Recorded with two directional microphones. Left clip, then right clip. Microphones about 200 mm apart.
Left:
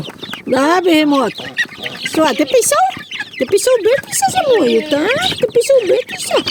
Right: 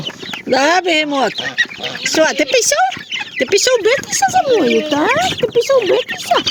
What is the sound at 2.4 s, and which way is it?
Speech, 25° left (ahead or behind).